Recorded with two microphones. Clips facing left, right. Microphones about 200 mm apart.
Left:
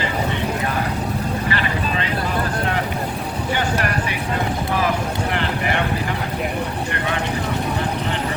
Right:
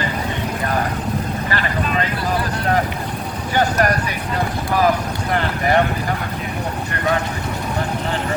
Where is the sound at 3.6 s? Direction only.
40° right (ahead or behind).